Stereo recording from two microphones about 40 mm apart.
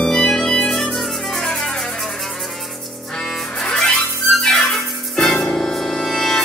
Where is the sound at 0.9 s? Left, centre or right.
Centre.